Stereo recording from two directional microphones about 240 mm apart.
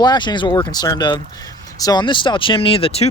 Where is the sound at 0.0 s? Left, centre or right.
Centre.